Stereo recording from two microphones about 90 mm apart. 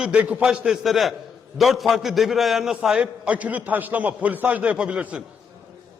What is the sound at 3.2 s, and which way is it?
A man's voice, 15° right (ahead or behind).